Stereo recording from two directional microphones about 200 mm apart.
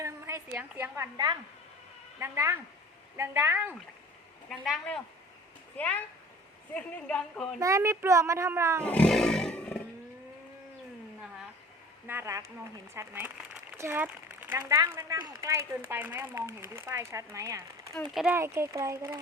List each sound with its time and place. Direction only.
0.0 s a woman's voice: 15° right (ahead or behind)
4.4 s a woman's voice: centre (ahead or behind)
7.6 s speech: 15° right (ahead or behind)
8.8 s roar: 5° left (ahead or behind)
12.0 s speech: 10° right (ahead or behind)
18.1 s a woman's voice: centre (ahead or behind)
18.3 s speech: 15° right (ahead or behind)